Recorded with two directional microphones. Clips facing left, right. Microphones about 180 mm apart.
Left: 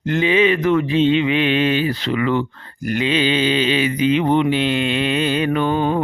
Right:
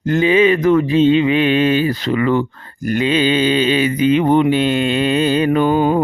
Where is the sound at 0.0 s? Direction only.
40° right (ahead or behind).